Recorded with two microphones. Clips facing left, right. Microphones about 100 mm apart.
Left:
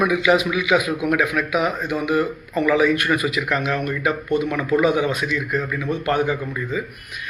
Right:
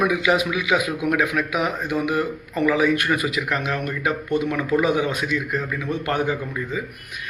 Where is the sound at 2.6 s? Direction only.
30° right (ahead or behind).